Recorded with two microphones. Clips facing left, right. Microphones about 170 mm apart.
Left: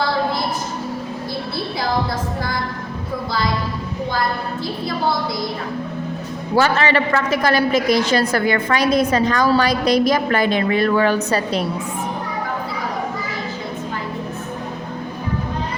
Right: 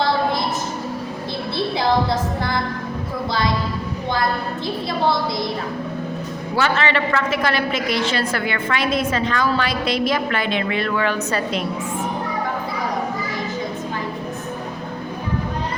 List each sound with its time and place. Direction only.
6.6 s a woman's voice: 40° left (ahead or behind)